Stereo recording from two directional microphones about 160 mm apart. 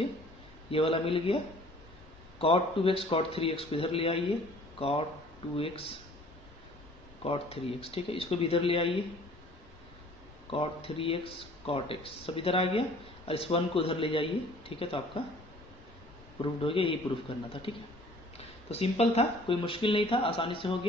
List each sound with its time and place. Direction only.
0.7 s speech: 35° left (ahead or behind)
7.2 s speech: 35° left (ahead or behind)
10.5 s speech: 35° left (ahead or behind)
16.3 s speech: 35° left (ahead or behind)